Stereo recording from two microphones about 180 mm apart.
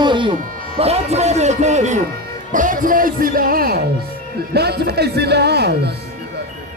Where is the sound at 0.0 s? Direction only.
25° right (ahead or behind).